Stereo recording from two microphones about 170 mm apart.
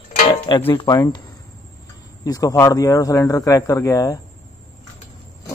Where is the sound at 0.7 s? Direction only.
25° left (ahead or behind).